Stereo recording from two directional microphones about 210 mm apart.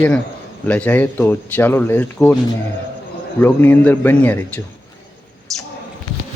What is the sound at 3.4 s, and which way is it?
A man's voice, 10° left (ahead or behind).